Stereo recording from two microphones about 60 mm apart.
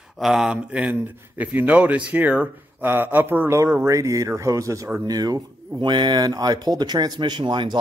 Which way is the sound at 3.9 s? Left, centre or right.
Right.